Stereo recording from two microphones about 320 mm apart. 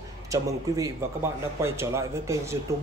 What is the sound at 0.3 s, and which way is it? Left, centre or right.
Speech, centre.